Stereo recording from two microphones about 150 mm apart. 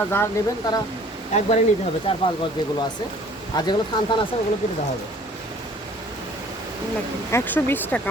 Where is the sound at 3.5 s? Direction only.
30° left (ahead or behind).